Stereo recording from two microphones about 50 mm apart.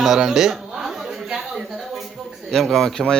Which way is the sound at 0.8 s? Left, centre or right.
Centre.